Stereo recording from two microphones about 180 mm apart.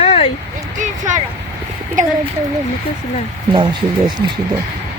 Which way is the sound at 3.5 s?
25° right (ahead or behind).